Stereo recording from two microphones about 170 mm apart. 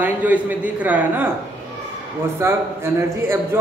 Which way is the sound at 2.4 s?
15° right (ahead or behind).